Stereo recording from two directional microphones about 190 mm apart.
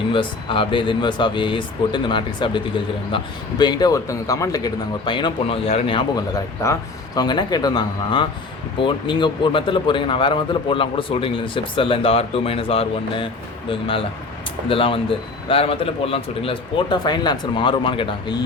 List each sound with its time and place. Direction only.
0.1 s a man's voice: 25° left (ahead or behind)